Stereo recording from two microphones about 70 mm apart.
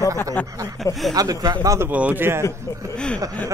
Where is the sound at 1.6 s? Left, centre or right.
Right.